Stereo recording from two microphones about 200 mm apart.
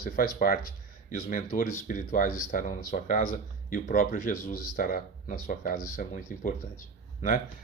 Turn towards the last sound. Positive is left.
turn(degrees=40)  # may be behind; listen again after turning